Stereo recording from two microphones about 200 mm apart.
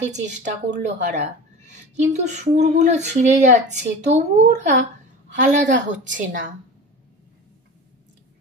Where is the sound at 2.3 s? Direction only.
35° right (ahead or behind).